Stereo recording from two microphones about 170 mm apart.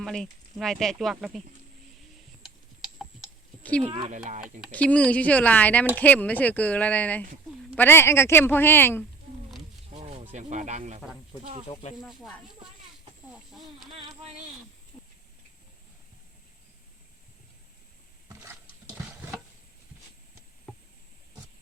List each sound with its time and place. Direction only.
0.0 s speech: 5° left (ahead or behind)
2.4 s tick-tock: 5° right (ahead or behind)
3.6 s speech: 10° left (ahead or behind)
3.8 s speech: 30° right (ahead or behind)
4.1 s speech: 45° right (ahead or behind)
4.7 s speech: 10° left (ahead or behind)
9.9 s snake: 40° right (ahead or behind)
11.0 s speech: centre (ahead or behind)
11.7 s speech: 40° left (ahead or behind)
12.0 s speech: centre (ahead or behind)
18.3 s a sound: 15° right (ahead or behind)